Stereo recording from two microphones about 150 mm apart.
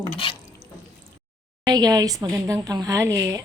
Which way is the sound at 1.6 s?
25° right (ahead or behind).